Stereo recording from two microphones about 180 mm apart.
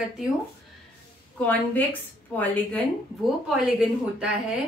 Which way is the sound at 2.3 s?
10° left (ahead or behind).